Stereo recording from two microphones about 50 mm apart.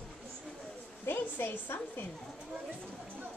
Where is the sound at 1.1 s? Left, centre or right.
Left.